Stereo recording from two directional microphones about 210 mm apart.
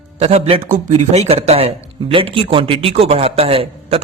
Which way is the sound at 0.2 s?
30° right (ahead or behind).